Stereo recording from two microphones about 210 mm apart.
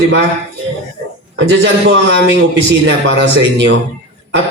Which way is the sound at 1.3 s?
55° right (ahead or behind).